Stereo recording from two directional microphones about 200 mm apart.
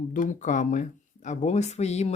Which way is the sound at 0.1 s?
40° left (ahead or behind).